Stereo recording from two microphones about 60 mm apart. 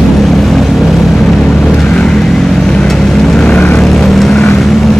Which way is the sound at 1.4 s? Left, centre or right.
Centre.